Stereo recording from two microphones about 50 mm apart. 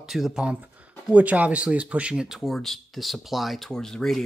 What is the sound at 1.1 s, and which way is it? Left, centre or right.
Speech, right.